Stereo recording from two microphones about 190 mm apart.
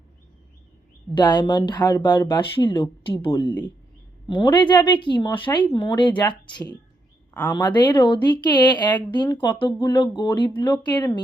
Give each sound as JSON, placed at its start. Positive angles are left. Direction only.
{"t": 1.1, "sound": "speech", "side_deg": 25}
{"t": 4.5, "sound": "speech", "side_deg": 25}